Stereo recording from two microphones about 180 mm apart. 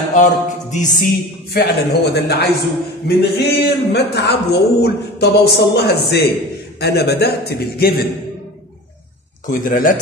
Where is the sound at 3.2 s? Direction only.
65° left (ahead or behind).